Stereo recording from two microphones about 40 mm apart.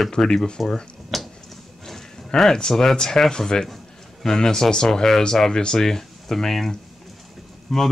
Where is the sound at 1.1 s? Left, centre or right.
Centre.